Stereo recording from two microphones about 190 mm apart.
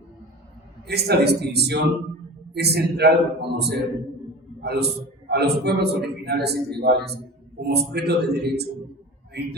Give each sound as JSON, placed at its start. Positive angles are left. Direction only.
{"t": 0.9, "sound": "a man's voice", "side_deg": -60}